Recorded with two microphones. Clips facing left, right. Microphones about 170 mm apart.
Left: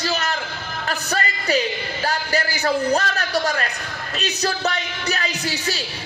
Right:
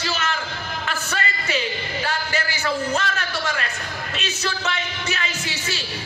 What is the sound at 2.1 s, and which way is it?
A man's voice, 35° left (ahead or behind).